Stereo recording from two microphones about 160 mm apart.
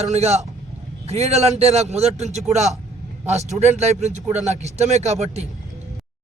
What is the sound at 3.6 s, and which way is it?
A man's voice, 45° right (ahead or behind).